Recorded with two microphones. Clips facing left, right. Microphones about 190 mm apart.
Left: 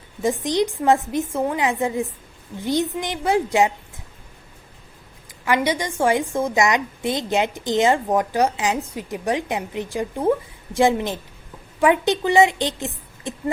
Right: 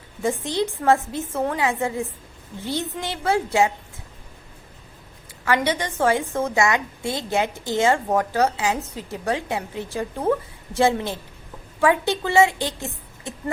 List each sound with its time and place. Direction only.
0.2 s a woman's voice: 15° left (ahead or behind)
5.5 s a woman's voice: 15° left (ahead or behind)